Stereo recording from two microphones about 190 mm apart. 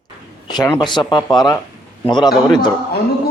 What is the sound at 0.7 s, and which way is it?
Speech, 25° left (ahead or behind).